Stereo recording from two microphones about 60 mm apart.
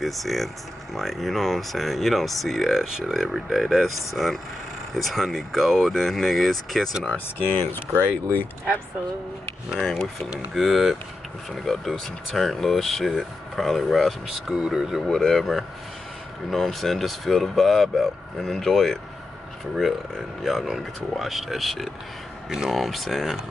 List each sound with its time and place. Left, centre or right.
0.0 s speech: centre
8.0 s speech: left
9.8 s speech: centre
10.5 s speech: centre
15.1 s speech: centre
20.4 s speech: centre